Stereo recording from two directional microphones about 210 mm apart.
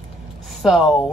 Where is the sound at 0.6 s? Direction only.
Centre (ahead or behind).